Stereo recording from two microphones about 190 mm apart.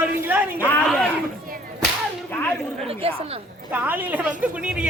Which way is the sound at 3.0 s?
30° right (ahead or behind).